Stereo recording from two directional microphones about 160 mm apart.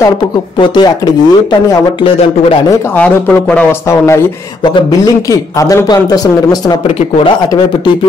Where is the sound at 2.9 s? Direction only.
10° left (ahead or behind).